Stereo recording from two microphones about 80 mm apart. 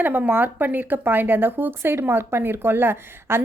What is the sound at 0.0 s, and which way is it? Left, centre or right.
A woman's voice, right.